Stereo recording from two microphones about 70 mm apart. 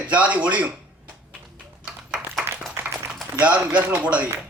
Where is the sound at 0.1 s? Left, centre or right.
Centre.